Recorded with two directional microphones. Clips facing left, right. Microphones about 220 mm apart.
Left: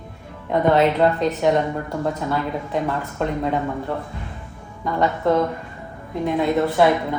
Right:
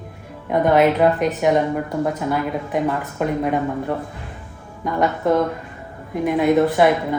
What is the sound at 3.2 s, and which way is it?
Speech, 10° right (ahead or behind).